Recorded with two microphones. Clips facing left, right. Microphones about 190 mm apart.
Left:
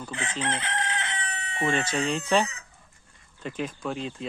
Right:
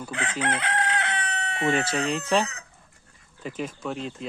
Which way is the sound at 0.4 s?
65° right (ahead or behind).